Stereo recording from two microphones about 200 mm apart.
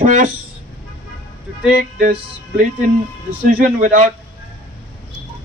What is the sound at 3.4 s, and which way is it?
Speech, 45° right (ahead or behind).